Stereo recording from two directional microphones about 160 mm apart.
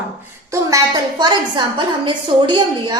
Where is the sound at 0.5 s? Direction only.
20° right (ahead or behind).